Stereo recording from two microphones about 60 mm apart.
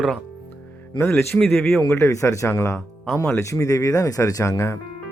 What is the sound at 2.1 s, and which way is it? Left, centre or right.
Speech, left.